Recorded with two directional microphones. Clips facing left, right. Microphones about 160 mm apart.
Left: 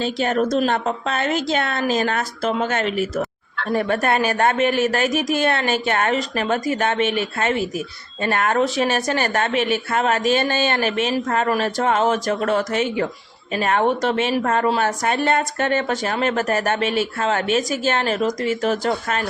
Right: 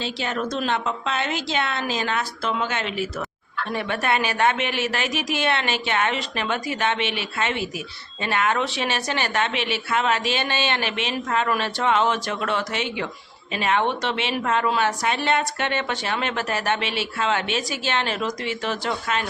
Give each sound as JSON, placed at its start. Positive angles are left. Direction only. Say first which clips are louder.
{"t": 0.0, "sound": "a woman's voice", "louder": "left 7 dB", "side_deg": 50}